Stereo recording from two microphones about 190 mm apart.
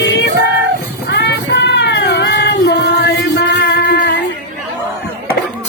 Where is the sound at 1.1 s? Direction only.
65° left (ahead or behind).